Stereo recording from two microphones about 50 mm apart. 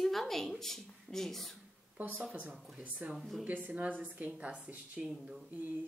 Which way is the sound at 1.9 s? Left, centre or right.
Right.